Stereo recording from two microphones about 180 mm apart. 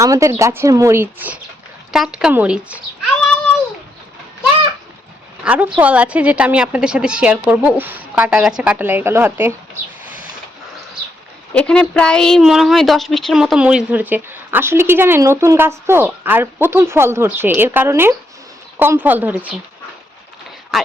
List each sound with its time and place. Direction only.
0.0 s a woman's voice: 15° right (ahead or behind)
5.4 s a woman's voice: 5° right (ahead or behind)
11.5 s a woman's voice: 5° left (ahead or behind)
20.7 s speech: centre (ahead or behind)